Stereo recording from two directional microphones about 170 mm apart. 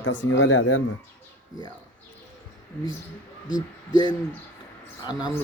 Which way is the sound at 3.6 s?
25° left (ahead or behind).